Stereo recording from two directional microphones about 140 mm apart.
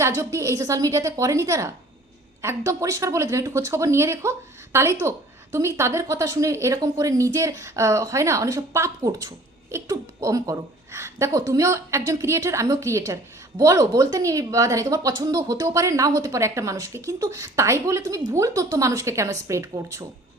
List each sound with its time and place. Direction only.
0.0 s speech: 20° right (ahead or behind)